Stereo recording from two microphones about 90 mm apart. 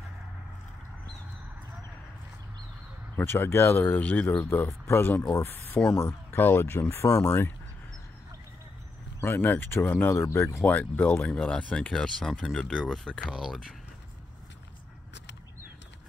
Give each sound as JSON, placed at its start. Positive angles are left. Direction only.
{"t": 3.2, "sound": "speech", "side_deg": 25}
{"t": 7.1, "sound": "speech", "side_deg": 35}
{"t": 9.2, "sound": "speech", "side_deg": 25}
{"t": 10.6, "sound": "speech", "side_deg": 15}
{"t": 13.3, "sound": "speech", "side_deg": -5}